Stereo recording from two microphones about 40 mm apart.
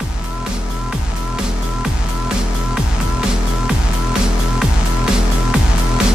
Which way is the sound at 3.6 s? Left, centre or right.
Centre.